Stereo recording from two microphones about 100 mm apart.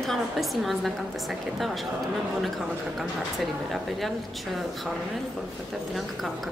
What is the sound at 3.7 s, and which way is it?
Speech, centre (ahead or behind).